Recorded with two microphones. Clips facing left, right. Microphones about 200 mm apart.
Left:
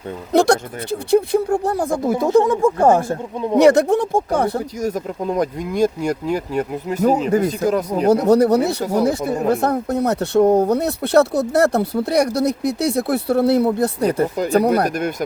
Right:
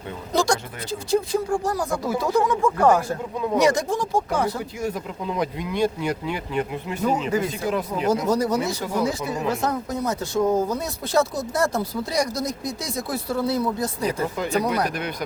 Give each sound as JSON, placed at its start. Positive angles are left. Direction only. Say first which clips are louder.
{"t": 0.3, "sound": "speech", "louder": "left 7 dB", "side_deg": 65}
{"t": 2.1, "sound": "speech", "louder": "left 6 dB", "side_deg": 25}
{"t": 3.6, "sound": "speech", "louder": "left 9 dB", "side_deg": 65}
{"t": 8.1, "sound": "speech", "louder": "left 9 dB", "side_deg": 65}
{"t": 8.8, "sound": "speech", "louder": "left 6 dB", "side_deg": 40}
{"t": 9.0, "sound": "speech", "louder": "left 7 dB", "side_deg": 55}
{"t": 14.3, "sound": "speech", "louder": "left 7 dB", "side_deg": 40}
{"t": 14.6, "sound": "speech", "louder": "left 7 dB", "side_deg": 50}